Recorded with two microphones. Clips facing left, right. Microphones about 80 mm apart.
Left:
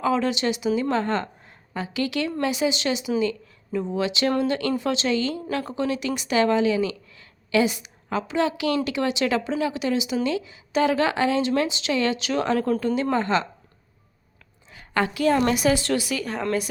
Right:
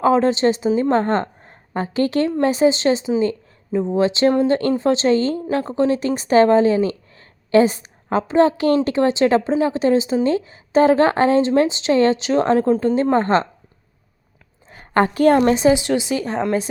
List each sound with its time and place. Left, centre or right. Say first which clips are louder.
0.0 s a woman's voice: right 7 dB; right
14.7 s a sound: right 7 dB; right
15.4 s a woman's voice: right 6 dB; right